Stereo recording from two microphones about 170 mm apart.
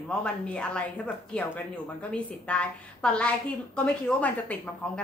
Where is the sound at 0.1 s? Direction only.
5° left (ahead or behind).